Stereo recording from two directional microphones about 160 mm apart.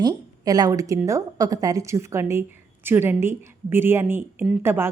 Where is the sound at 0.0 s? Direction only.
25° right (ahead or behind).